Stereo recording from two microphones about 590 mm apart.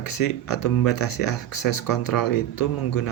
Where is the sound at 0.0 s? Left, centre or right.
Left.